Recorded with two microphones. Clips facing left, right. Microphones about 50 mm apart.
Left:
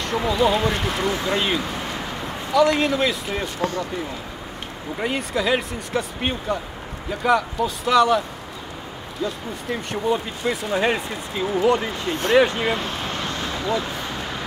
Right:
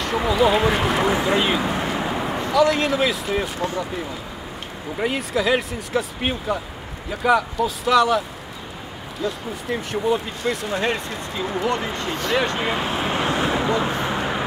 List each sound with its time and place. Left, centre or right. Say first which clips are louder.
0.0 s speech: right 1 dB; centre
1.6 s a sound: right 5 dB; centre
2.5 s speech: left 1 dB; centre
4.9 s speech: right 2 dB; centre
12.4 s vehicle: left 5 dB; centre; by 14.4 s right